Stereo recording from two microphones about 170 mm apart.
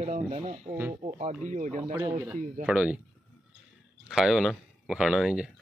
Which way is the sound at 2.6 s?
10° right (ahead or behind).